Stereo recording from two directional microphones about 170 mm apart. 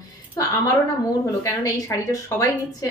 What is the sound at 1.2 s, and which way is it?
A woman's voice, 20° left (ahead or behind).